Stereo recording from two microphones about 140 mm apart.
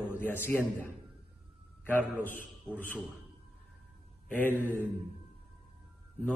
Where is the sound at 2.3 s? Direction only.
10° left (ahead or behind).